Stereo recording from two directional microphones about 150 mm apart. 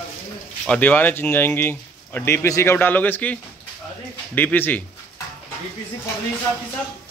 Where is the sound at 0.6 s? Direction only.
10° left (ahead or behind).